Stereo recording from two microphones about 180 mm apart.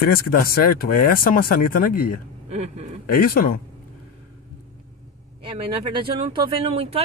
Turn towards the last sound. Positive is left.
turn(degrees=-35)  # may be behind; listen again after turning